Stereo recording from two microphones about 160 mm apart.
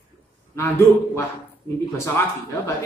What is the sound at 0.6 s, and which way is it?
A woman's voice, 15° left (ahead or behind).